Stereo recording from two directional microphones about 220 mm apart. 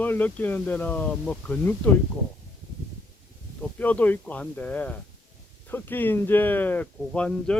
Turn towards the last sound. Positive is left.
turn(degrees=5)  # may be behind; listen again after turning